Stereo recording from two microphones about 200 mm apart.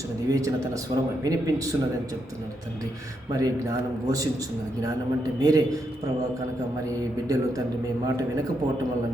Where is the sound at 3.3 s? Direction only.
15° right (ahead or behind).